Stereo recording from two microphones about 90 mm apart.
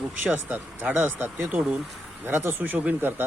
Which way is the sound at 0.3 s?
20° right (ahead or behind).